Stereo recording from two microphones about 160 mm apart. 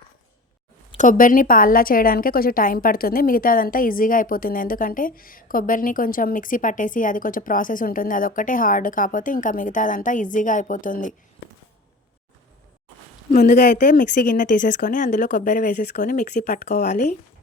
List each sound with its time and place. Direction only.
0.9 s a woman's voice: 55° left (ahead or behind)
13.3 s speech: 55° left (ahead or behind)